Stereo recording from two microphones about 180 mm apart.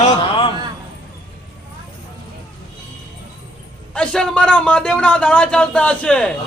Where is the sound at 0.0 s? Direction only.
30° left (ahead or behind).